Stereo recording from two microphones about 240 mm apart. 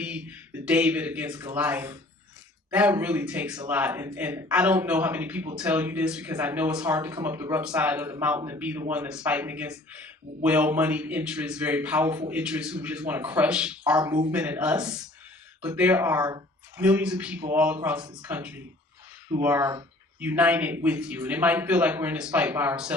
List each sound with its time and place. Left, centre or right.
0.0 s speech: centre
14.0 s speech: centre